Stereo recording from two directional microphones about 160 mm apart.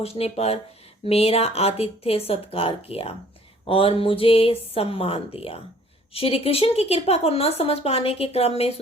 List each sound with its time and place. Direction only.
0.0 s speech: 40° left (ahead or behind)